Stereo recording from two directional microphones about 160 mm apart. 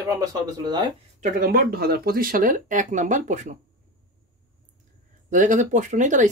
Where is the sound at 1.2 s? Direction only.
65° right (ahead or behind); by 3.6 s 50° right (ahead or behind).